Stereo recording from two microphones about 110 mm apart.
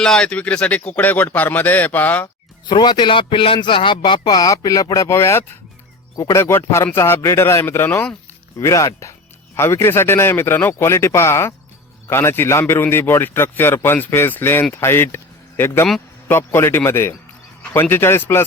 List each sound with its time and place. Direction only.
0.0 s a man's voice: 5° left (ahead or behind)
2.6 s a man's voice: 40° left (ahead or behind); by 8.1 s 15° left (ahead or behind)
8.5 s a man's voice: 30° left (ahead or behind)